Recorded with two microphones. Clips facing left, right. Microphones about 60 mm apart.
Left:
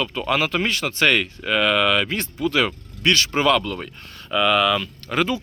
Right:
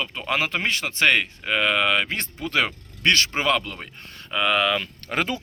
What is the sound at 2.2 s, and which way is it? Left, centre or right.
Speech, right.